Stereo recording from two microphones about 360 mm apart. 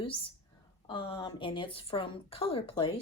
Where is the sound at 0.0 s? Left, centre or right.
Centre.